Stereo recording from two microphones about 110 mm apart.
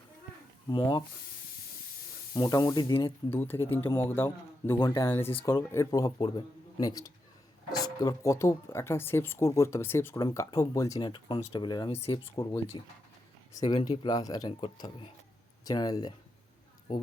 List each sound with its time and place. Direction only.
0.7 s speech: 45° left (ahead or behind)
2.3 s speech: 35° left (ahead or behind)
3.2 s speech: 20° left (ahead or behind)
5.8 s speech: 35° left (ahead or behind)
11.0 s speech: 50° left (ahead or behind)
13.5 s speech: 35° left (ahead or behind)
15.6 s speech: 35° left (ahead or behind)